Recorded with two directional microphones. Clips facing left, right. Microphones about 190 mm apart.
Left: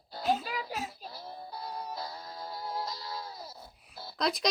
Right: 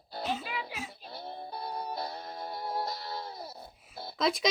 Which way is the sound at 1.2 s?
25° right (ahead or behind).